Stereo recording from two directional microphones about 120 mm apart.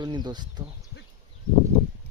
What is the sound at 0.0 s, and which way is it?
Speech, 40° right (ahead or behind).